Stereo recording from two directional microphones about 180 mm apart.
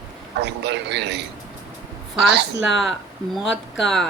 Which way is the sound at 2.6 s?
Centre (ahead or behind).